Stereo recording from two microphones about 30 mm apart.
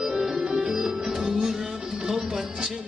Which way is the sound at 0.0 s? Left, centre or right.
Centre.